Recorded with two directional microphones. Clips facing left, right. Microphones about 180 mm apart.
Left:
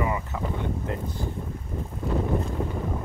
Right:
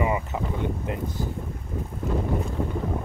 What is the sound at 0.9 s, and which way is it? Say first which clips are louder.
Speech: right 1 dB; 15° right (ahead or behind).